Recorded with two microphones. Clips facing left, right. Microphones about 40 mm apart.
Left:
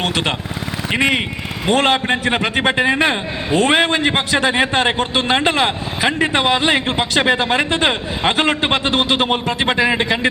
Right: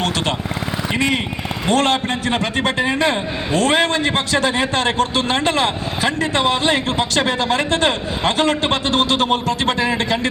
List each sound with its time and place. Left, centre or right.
0.9 s a man's voice: left